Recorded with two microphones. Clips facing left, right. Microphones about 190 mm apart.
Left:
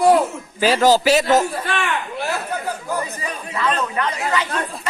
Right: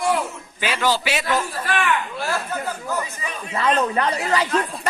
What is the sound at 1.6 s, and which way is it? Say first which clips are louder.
Speech: right 1 dB; 25° left (ahead or behind).